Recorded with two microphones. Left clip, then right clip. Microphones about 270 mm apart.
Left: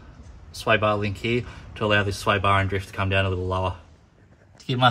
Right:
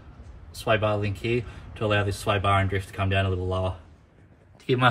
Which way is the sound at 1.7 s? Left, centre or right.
Left.